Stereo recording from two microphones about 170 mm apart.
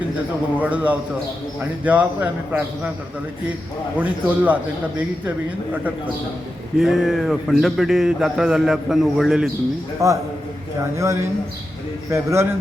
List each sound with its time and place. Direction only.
0.6 s speech: 10° right (ahead or behind)
3.9 s speech: 10° right (ahead or behind)
6.7 s speech: centre (ahead or behind)
10.0 s a man's voice: 20° right (ahead or behind)